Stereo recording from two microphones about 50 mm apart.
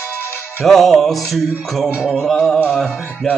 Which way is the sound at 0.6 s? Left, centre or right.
Centre.